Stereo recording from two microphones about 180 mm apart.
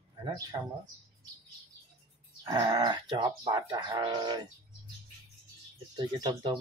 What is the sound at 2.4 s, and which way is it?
Speech, 20° right (ahead or behind).